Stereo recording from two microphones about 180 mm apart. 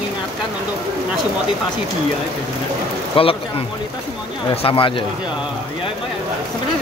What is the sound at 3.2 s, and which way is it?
Speech, 30° left (ahead or behind).